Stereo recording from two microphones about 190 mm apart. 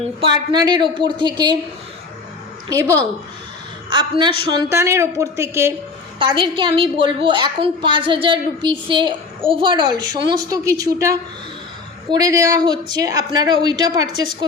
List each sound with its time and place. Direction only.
0.2 s a woman's voice: 25° right (ahead or behind)
3.8 s speech: 25° right (ahead or behind)
6.1 s a woman's voice: 25° right (ahead or behind)